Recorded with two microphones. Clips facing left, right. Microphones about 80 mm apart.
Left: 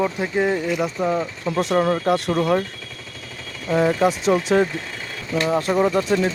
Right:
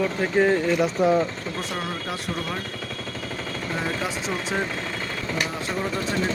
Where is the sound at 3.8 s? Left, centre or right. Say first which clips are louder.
Left 12 dB; left.